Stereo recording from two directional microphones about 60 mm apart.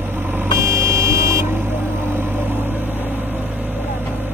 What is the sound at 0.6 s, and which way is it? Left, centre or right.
Vehicle, right.